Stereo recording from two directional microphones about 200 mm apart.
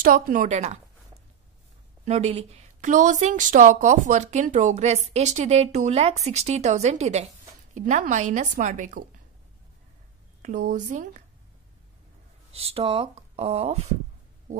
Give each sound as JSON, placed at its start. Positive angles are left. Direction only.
{"t": 0.0, "sound": "a woman's voice", "side_deg": -45}
{"t": 2.0, "sound": "a woman's voice", "side_deg": -30}
{"t": 10.4, "sound": "a woman's voice", "side_deg": -40}
{"t": 12.5, "sound": "speech", "side_deg": -30}